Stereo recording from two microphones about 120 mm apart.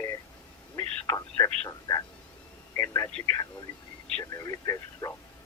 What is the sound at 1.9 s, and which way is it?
Speech, 30° left (ahead or behind).